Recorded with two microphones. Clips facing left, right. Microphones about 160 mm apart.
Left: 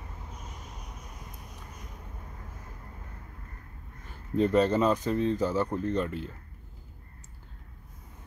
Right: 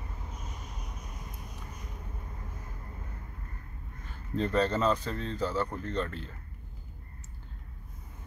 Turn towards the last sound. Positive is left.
turn(degrees=10)  # may be behind; listen again after turning